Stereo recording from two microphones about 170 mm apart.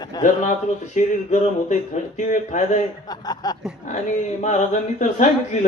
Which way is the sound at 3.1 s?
25° left (ahead or behind).